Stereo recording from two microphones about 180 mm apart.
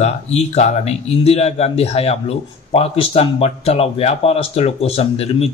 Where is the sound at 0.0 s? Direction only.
35° left (ahead or behind).